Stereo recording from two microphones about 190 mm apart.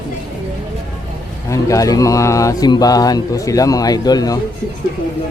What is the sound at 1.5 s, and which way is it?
Speech, 15° left (ahead or behind).